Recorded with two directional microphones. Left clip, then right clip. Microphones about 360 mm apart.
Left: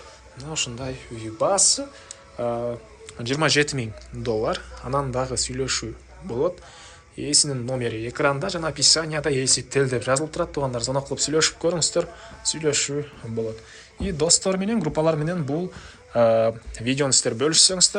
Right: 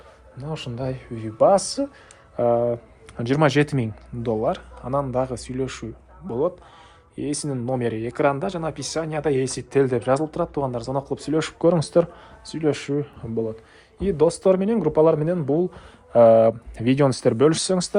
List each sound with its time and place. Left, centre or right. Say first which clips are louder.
0.3 s speech: left 2 dB; centre